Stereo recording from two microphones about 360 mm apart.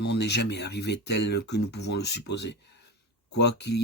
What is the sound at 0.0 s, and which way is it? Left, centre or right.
Speech, left.